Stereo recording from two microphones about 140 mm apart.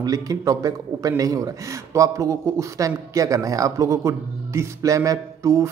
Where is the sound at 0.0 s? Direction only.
25° right (ahead or behind).